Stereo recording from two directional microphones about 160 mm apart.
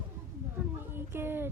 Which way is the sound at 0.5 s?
15° right (ahead or behind).